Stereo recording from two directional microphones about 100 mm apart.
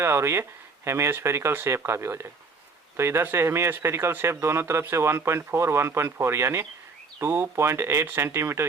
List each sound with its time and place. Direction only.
0.0 s speech: 25° right (ahead or behind)